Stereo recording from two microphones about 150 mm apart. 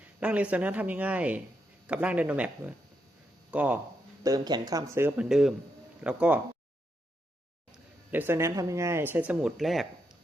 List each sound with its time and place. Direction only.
0.2 s speech: 10° right (ahead or behind)
4.2 s speech: 25° right (ahead or behind)
7.7 s speech: 15° right (ahead or behind)